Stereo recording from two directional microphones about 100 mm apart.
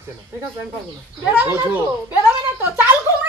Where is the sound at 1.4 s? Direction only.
20° right (ahead or behind).